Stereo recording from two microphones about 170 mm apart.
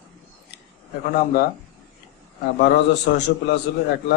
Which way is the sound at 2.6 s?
75° left (ahead or behind).